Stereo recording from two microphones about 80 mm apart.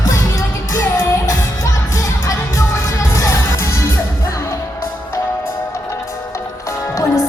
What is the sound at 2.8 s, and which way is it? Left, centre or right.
Music, left.